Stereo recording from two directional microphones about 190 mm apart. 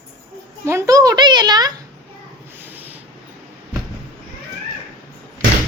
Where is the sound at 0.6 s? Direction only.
15° right (ahead or behind).